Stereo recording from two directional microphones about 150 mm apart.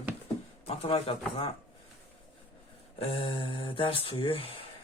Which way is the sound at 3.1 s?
35° left (ahead or behind).